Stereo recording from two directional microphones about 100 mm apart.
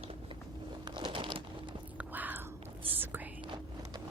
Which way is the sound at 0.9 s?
55° right (ahead or behind).